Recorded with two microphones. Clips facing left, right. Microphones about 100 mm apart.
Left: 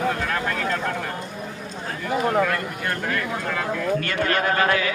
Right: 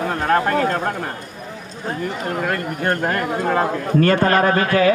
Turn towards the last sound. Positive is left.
turn(degrees=-45)  # may be behind; listen again after turning